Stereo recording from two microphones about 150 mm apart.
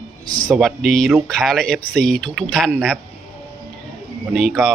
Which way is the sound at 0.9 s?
Centre (ahead or behind).